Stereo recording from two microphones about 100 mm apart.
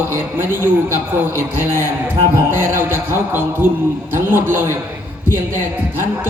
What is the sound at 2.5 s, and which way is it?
A man's voice, 25° right (ahead or behind).